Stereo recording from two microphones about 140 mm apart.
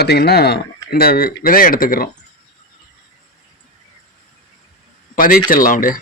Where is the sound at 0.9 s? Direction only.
90° left.